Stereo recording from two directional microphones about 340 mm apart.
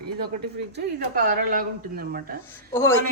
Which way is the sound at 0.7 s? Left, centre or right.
Right.